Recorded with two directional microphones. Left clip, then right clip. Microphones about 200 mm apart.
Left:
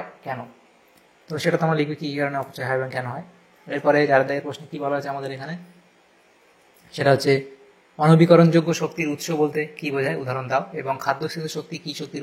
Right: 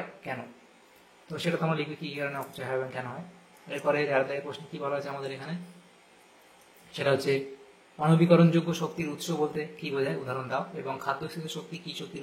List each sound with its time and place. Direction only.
1.2 s a man's voice: 30° left (ahead or behind)
7.0 s a man's voice: 30° left (ahead or behind)